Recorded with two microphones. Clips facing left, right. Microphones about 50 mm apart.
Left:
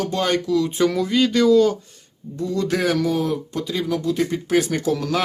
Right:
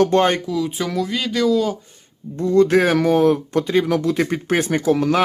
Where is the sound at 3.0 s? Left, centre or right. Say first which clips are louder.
Right 6 dB; right.